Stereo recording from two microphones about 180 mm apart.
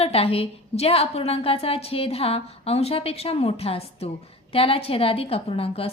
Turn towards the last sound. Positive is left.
turn(degrees=30)  # may be behind; listen again after turning